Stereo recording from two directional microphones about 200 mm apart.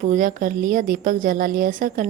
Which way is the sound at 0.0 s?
40° right (ahead or behind).